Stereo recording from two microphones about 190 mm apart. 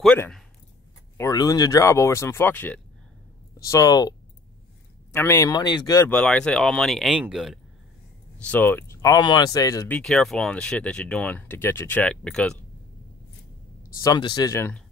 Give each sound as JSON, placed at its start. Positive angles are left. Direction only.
{"t": 0.0, "sound": "speech", "side_deg": 5}
{"t": 1.1, "sound": "speech", "side_deg": 20}
{"t": 5.1, "sound": "speech", "side_deg": 15}
{"t": 6.0, "sound": "speech", "side_deg": 5}
{"t": 8.5, "sound": "speech", "side_deg": 10}
{"t": 9.9, "sound": "speech", "side_deg": 5}
{"t": 14.0, "sound": "speech", "side_deg": 20}